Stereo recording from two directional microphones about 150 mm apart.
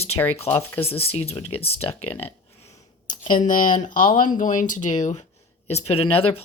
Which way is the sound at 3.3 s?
60° left (ahead or behind).